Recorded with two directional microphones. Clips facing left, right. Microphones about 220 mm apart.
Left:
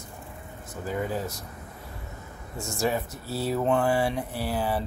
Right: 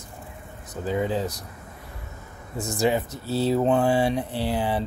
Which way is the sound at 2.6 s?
20° right (ahead or behind).